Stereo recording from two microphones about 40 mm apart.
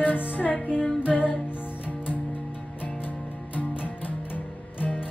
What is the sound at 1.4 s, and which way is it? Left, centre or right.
Music, left.